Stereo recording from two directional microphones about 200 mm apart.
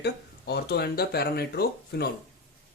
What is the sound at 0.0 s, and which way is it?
Speech, 55° left (ahead or behind).